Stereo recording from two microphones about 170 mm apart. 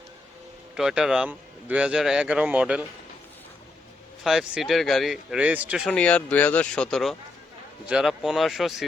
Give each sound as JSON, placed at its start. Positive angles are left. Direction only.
{"t": 0.8, "sound": "a man's voice", "side_deg": -5}
{"t": 4.2, "sound": "a man's voice", "side_deg": 0}
{"t": 5.9, "sound": "a man's voice", "side_deg": 10}